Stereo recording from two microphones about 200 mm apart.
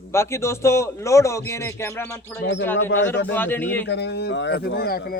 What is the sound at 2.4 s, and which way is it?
Speech, 65° left (ahead or behind).